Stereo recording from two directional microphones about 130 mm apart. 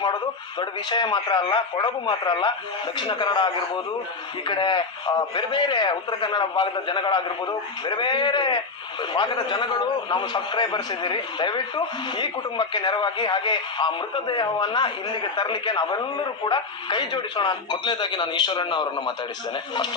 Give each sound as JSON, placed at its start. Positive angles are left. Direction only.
{"t": 0.6, "sound": "a man's voice", "side_deg": 35}